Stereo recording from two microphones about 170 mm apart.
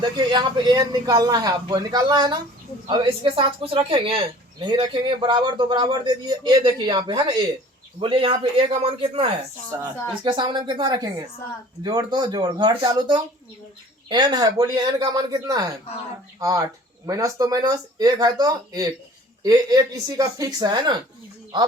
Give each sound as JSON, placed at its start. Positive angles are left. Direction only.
{"t": 0.2, "sound": "speech", "side_deg": -25}
{"t": 9.7, "sound": "speech", "side_deg": -20}